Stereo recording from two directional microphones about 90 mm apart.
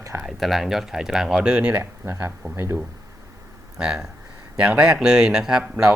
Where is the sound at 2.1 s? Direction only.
30° right (ahead or behind).